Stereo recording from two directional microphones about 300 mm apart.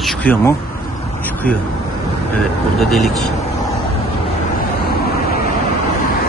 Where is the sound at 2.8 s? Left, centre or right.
Centre.